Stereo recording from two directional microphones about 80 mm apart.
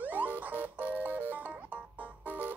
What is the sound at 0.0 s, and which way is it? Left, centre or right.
Music, right.